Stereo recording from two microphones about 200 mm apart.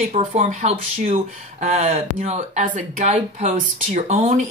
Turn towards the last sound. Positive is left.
turn(degrees=-30)  # may be behind; listen again after turning